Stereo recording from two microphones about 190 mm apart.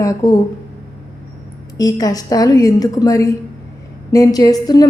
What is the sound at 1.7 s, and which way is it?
A woman's voice, 20° left (ahead or behind).